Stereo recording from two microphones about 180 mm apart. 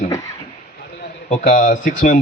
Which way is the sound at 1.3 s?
45° left (ahead or behind).